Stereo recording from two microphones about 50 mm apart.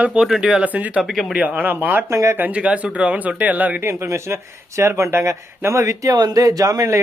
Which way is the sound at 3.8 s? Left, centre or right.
Right.